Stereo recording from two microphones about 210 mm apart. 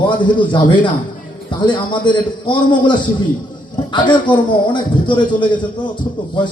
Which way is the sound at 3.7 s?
20° left (ahead or behind).